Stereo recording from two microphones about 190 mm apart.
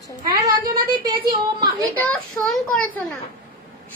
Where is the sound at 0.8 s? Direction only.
25° right (ahead or behind).